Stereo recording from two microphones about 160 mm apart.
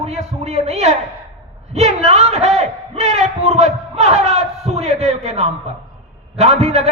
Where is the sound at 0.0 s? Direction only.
40° right (ahead or behind).